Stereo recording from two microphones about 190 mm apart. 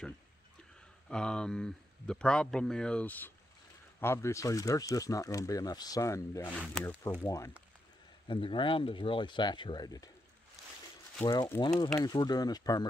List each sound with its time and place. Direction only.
1.0 s speech: 5° left (ahead or behind); by 10.1 s 20° left (ahead or behind)
11.2 s speech: 15° left (ahead or behind)